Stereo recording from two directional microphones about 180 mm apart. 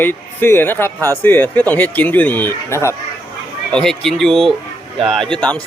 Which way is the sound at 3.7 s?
5° left (ahead or behind).